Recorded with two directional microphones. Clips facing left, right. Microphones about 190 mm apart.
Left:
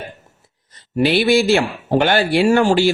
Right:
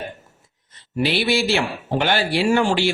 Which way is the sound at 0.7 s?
45° left (ahead or behind).